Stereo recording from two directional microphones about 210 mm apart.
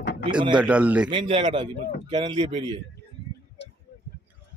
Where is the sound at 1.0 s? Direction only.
25° right (ahead or behind).